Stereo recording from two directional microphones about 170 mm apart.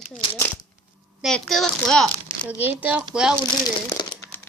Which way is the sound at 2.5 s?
10° right (ahead or behind).